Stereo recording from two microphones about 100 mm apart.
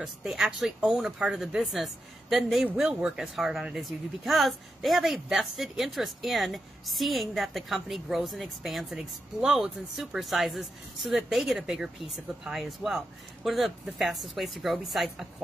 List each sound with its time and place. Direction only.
0.0 s speech: 5° right (ahead or behind)